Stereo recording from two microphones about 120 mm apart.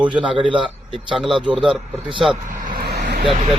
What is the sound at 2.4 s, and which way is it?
Vehicle, 90° right.